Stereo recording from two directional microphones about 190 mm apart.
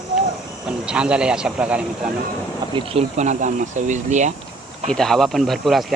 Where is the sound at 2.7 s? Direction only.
30° right (ahead or behind).